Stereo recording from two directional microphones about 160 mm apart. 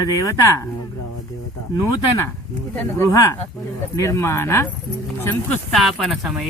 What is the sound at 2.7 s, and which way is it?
Speech, 15° left (ahead or behind).